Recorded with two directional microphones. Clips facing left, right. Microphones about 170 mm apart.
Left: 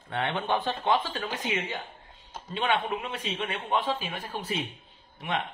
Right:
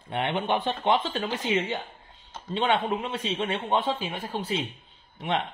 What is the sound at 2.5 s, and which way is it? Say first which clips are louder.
Speech: right 3 dB; 25° right (ahead or behind).